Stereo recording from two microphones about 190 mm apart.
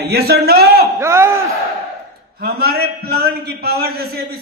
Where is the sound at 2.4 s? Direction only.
55° right (ahead or behind).